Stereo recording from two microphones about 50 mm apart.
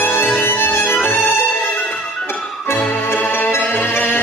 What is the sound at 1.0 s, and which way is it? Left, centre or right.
Violin, left.